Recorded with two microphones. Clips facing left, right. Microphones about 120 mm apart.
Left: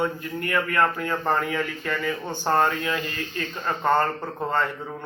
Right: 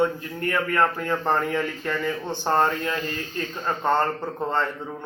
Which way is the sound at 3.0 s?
45° right (ahead or behind).